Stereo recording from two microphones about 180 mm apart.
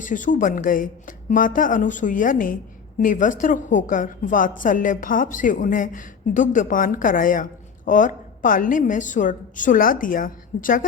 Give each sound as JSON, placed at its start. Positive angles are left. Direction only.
{"t": 0.0, "sound": "a woman's voice", "side_deg": 45}